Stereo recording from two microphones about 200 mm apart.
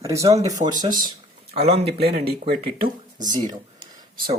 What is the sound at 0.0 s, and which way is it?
Speech, 15° right (ahead or behind).